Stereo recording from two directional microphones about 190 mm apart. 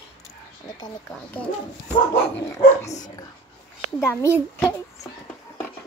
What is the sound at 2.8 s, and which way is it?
Speech, 35° left (ahead or behind).